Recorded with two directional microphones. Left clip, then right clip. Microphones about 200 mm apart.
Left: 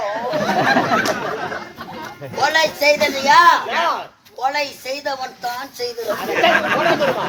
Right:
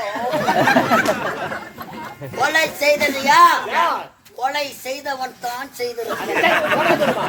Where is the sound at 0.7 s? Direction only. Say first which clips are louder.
Even; 50° right (ahead or behind).